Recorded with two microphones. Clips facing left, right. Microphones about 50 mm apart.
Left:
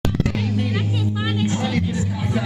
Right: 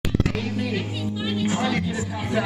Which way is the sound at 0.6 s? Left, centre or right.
Left.